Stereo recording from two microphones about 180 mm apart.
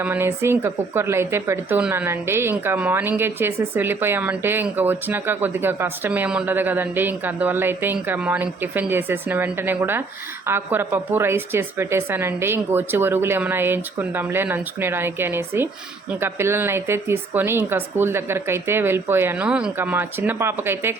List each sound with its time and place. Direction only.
0.0 s a woman's voice: 10° right (ahead or behind)